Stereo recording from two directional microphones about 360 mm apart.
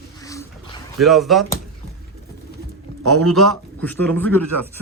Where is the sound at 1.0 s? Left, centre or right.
Centre.